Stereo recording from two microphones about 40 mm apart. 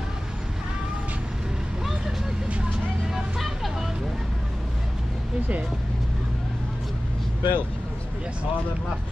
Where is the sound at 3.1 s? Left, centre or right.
Centre.